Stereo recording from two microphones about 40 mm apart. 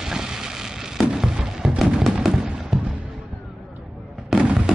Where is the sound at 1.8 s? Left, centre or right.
Centre.